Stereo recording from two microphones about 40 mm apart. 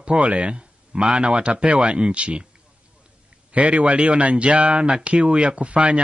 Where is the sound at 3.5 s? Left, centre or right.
Right.